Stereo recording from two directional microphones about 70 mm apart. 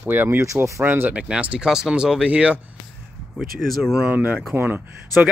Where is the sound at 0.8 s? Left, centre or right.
Right.